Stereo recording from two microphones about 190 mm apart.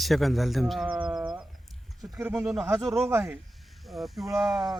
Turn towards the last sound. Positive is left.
turn(degrees=0)  # may be behind; listen again after turning